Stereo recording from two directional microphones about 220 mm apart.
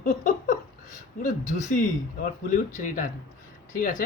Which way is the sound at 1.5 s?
30° left (ahead or behind).